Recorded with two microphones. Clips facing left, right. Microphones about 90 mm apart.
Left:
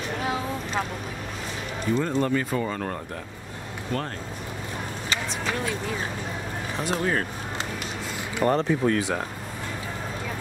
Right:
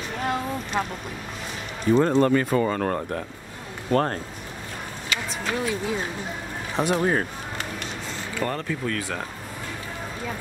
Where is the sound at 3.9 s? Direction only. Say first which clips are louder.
Right 8 dB; 40° right (ahead or behind).